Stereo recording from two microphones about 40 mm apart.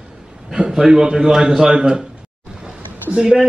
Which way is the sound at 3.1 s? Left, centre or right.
Right.